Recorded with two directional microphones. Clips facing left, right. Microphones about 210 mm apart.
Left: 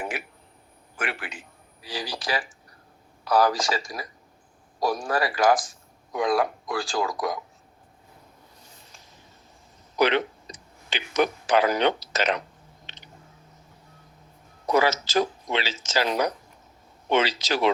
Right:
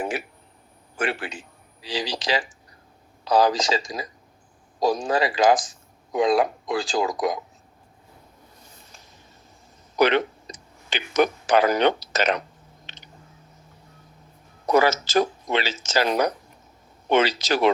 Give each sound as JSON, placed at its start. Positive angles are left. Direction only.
{"t": 0.9, "sound": "speech", "side_deg": -30}
{"t": 10.0, "sound": "speech", "side_deg": -45}
{"t": 14.7, "sound": "speech", "side_deg": -45}